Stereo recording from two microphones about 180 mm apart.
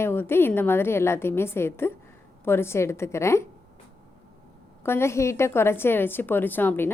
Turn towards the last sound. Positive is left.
turn(degrees=10)  # may be behind; listen again after turning